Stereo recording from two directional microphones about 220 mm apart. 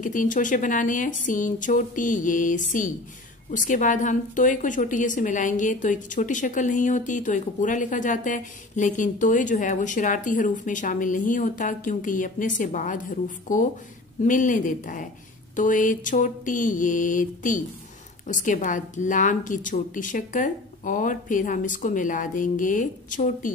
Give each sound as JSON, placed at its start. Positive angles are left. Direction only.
{"t": 0.0, "sound": "a woman's voice", "side_deg": 35}